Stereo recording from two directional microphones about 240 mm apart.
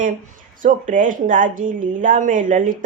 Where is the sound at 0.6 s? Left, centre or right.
Right.